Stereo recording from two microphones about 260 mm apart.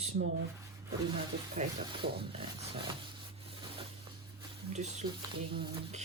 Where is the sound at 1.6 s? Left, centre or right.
Right.